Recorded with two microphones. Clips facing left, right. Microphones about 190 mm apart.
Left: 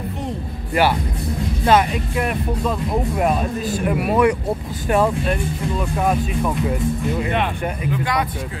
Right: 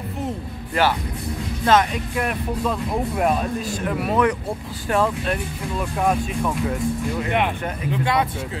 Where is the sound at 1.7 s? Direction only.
5° left (ahead or behind).